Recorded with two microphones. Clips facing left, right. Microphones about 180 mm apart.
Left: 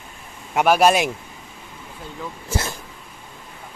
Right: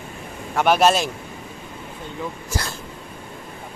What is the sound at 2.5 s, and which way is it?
Speech, 20° left (ahead or behind).